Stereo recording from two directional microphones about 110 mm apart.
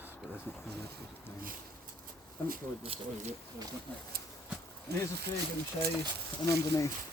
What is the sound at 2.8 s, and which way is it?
Speech, 60° right (ahead or behind).